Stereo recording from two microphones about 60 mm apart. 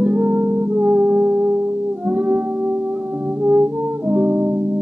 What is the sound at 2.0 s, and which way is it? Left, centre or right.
Music, right.